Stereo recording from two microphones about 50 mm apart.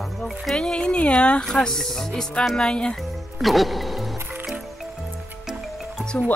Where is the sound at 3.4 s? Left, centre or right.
Centre.